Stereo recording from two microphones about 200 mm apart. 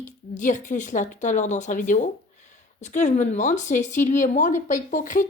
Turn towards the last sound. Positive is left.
turn(degrees=40)  # may be behind; listen again after turning